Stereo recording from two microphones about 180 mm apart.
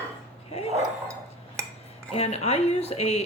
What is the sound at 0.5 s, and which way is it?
Dog, 35° left (ahead or behind).